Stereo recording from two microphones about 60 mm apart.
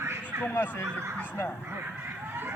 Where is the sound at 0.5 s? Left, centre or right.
Left.